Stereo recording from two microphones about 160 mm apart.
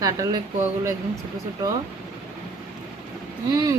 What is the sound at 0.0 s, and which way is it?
Speech, 20° right (ahead or behind).